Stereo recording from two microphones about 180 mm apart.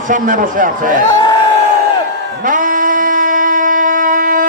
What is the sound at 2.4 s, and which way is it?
Singing, 45° right (ahead or behind).